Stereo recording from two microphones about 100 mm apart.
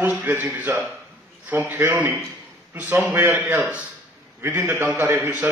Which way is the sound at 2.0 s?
25° right (ahead or behind).